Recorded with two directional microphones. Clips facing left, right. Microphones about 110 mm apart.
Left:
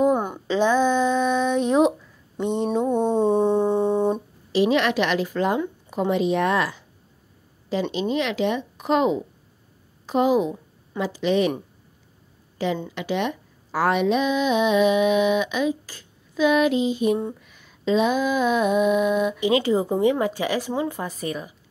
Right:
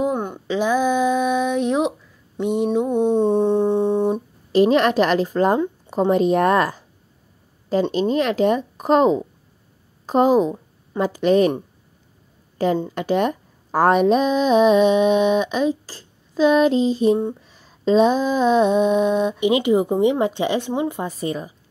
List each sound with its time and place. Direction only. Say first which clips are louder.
0.0 s a sound: left 2 dB; 5° left (ahead or behind)
4.5 s a woman's voice: right 4 dB; 40° right (ahead or behind)
12.5 s speech: right 5 dB; 40° right (ahead or behind)